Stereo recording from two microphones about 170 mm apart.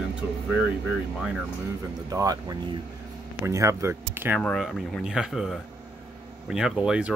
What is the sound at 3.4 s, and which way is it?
Speech, 15° right (ahead or behind).